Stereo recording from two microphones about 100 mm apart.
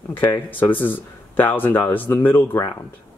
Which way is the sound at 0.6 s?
20° left (ahead or behind).